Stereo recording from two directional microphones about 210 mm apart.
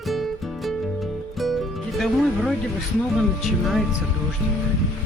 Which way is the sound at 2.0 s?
Centre (ahead or behind).